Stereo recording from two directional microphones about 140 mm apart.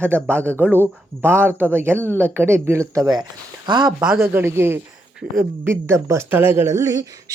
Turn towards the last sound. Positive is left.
turn(degrees=-25)  # may be behind; listen again after turning